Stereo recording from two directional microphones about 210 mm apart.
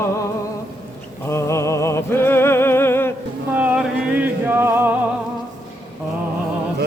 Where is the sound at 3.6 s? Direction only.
5° right (ahead or behind).